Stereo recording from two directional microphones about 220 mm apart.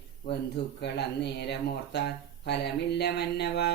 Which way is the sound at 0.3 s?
50° left (ahead or behind).